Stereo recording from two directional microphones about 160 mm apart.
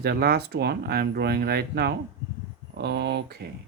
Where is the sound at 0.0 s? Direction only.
75° right (ahead or behind).